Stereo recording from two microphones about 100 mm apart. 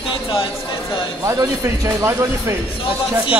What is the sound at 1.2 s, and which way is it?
Speech, 30° right (ahead or behind).